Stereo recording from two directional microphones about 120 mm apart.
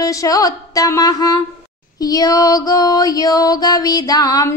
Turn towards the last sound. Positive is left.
turn(degrees=30)  # may be behind; listen again after turning